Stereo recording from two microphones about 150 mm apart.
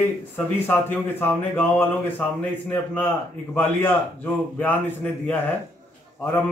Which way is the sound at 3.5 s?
15° left (ahead or behind).